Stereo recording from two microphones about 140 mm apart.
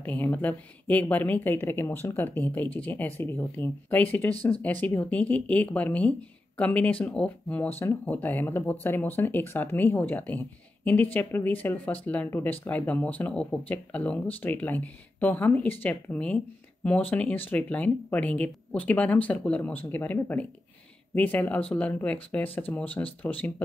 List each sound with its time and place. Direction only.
0.0 s a woman's voice: 10° left (ahead or behind)